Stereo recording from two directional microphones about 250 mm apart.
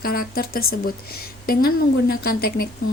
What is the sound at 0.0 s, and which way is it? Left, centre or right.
Speech, left.